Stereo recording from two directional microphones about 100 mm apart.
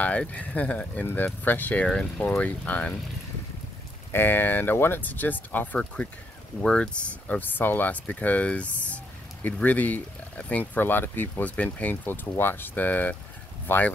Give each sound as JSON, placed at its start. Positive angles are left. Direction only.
{"t": 0.0, "sound": "speech", "side_deg": 15}
{"t": 4.1, "sound": "speech", "side_deg": 20}